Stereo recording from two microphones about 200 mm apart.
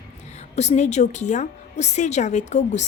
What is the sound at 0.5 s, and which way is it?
A woman's voice, 35° left (ahead or behind).